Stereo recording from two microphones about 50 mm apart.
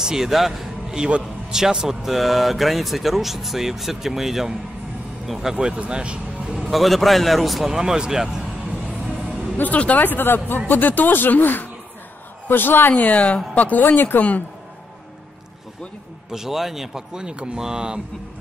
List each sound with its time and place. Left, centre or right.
0.0 s a man's voice: centre
9.6 s a woman's voice: left
12.9 s speech: left
16.3 s speech: centre